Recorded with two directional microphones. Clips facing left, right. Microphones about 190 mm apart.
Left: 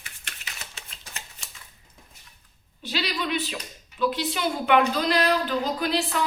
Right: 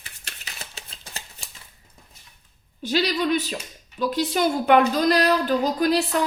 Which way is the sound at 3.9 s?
40° right (ahead or behind).